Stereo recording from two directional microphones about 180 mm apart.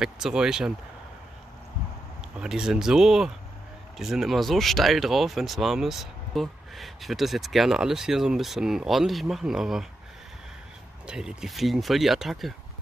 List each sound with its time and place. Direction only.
0.0 s speech: 5° right (ahead or behind)
2.3 s speech: 5° right (ahead or behind)
11.1 s speech: 5° right (ahead or behind)